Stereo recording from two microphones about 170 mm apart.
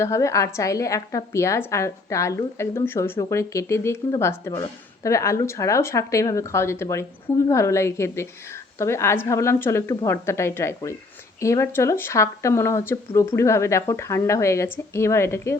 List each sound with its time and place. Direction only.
0.0 s a woman's voice: 15° left (ahead or behind)